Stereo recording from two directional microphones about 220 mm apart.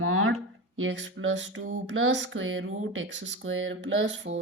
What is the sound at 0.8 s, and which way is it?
Speech, 60° right (ahead or behind).